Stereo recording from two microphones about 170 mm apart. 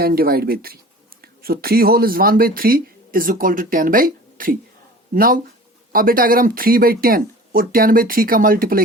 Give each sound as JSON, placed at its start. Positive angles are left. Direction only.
{"t": 0.0, "sound": "speech", "side_deg": -60}